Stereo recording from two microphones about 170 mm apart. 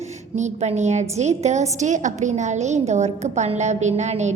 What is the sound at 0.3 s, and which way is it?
A woman's voice, 40° right (ahead or behind).